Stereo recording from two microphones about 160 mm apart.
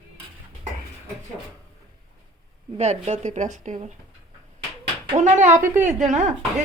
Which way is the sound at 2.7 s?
40° right (ahead or behind).